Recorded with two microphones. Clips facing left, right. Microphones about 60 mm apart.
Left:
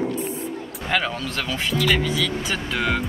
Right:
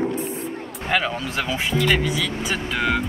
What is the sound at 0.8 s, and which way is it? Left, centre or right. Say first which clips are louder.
Speech: right 1 dB; centre.